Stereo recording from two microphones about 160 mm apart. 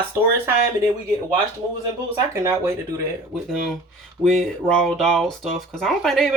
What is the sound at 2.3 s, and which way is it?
Speech, 15° right (ahead or behind).